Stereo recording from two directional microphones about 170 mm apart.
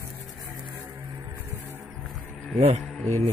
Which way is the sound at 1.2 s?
15° right (ahead or behind).